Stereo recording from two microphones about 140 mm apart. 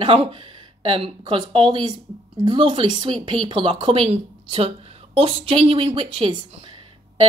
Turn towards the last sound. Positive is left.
turn(degrees=-40)  # may be behind; listen again after turning